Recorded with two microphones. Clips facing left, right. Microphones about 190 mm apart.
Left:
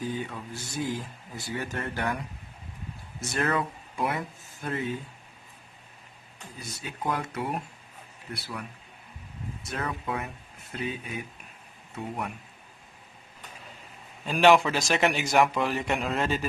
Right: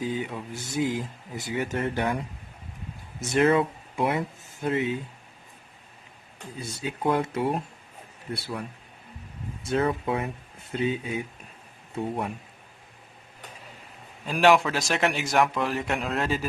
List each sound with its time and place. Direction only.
0.0 s speech: 20° right (ahead or behind)
6.6 s speech: 30° right (ahead or behind)
9.6 s speech: 30° right (ahead or behind)
14.3 s a man's voice: centre (ahead or behind)